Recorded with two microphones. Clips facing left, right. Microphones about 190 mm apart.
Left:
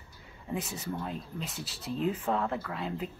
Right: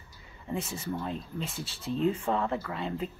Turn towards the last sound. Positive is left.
turn(degrees=0)  # may be behind; listen again after turning